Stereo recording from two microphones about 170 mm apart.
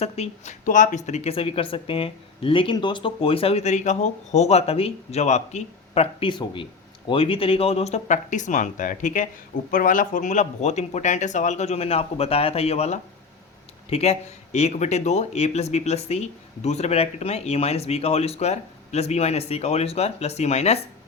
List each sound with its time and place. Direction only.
0.0 s speech: 40° left (ahead or behind)